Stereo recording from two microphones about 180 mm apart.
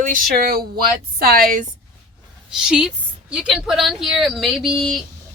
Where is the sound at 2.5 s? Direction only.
5° right (ahead or behind).